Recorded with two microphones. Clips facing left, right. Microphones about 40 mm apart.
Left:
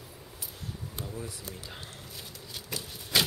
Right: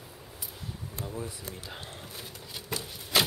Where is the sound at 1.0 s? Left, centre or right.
Centre.